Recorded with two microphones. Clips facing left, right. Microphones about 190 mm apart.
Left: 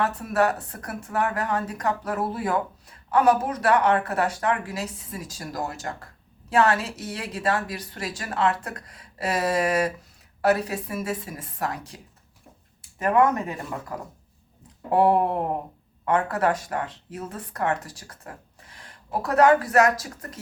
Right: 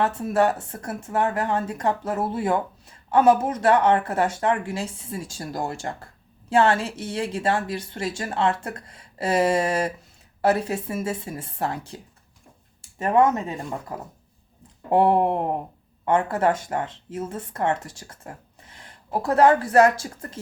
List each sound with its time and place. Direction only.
0.0 s speech: 25° right (ahead or behind)
13.0 s speech: 25° right (ahead or behind)
14.8 s speech: 25° right (ahead or behind)